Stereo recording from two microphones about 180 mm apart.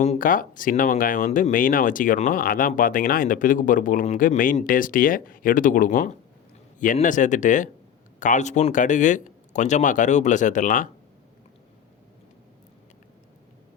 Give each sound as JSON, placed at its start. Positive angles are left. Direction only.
{"t": 0.0, "sound": "speech", "side_deg": 45}